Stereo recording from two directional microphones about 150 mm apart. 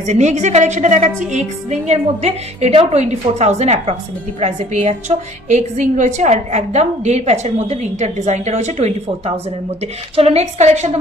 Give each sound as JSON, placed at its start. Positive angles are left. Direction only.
{"t": 0.0, "sound": "a woman's voice", "side_deg": -50}